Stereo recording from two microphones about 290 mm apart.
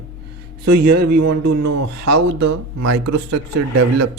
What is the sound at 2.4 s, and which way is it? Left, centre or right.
Speech, right.